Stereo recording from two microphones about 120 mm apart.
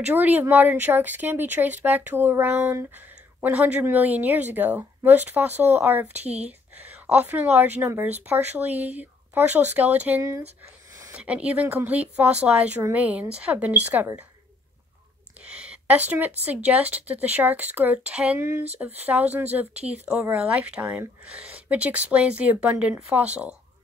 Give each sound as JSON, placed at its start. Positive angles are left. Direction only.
{"t": 0.0, "sound": "speech", "side_deg": -15}
{"t": 6.1, "sound": "speech", "side_deg": -65}
{"t": 7.1, "sound": "speech", "side_deg": -15}
{"t": 15.4, "sound": "a sound", "side_deg": -10}
{"t": 16.4, "sound": "speech", "side_deg": -15}